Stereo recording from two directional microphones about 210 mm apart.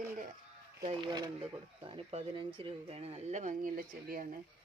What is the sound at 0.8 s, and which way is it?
Speech, 30° right (ahead or behind).